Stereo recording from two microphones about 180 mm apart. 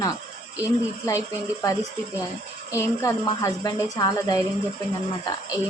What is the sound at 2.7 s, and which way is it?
Speech, 15° left (ahead or behind).